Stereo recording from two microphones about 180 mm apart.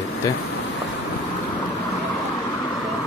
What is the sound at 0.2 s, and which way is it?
Speech, 20° left (ahead or behind).